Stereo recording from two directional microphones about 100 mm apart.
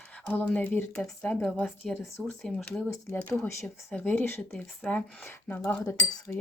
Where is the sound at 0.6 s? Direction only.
15° left (ahead or behind).